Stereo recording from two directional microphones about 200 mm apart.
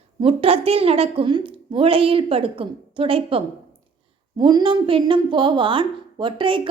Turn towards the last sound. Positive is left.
turn(degrees=-25)  # may be behind; listen again after turning